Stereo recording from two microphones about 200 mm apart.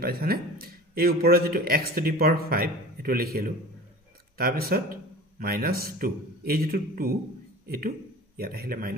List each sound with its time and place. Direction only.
0.0 s a man's voice: 50° right (ahead or behind)